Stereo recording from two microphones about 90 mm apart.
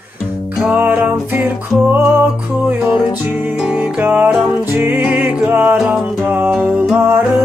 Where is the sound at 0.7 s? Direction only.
20° right (ahead or behind).